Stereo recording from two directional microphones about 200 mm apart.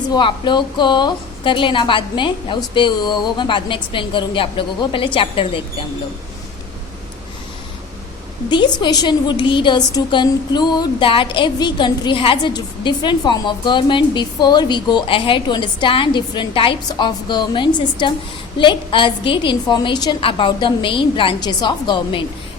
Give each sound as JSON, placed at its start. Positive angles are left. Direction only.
{"t": 0.1, "sound": "a woman's voice", "side_deg": 25}
{"t": 8.4, "sound": "a woman's voice", "side_deg": 20}